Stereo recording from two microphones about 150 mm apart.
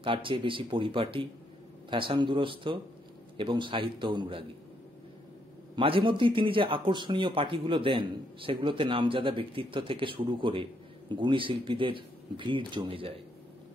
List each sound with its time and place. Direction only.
0.0 s speech: 35° right (ahead or behind)
5.8 s speech: 35° right (ahead or behind)